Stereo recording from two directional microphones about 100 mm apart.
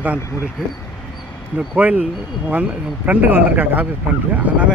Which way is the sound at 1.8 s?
15° right (ahead or behind).